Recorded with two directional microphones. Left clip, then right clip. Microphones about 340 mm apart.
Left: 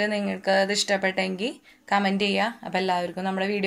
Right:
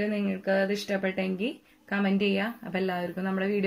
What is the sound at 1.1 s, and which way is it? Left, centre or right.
Speech, left.